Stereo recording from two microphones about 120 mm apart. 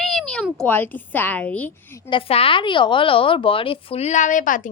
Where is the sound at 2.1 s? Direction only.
50° left (ahead or behind); by 4.6 s 90° left.